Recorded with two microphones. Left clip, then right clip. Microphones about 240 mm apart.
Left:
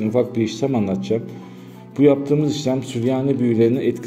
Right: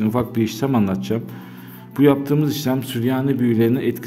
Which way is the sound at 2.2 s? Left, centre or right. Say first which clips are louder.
Left 1 dB; right.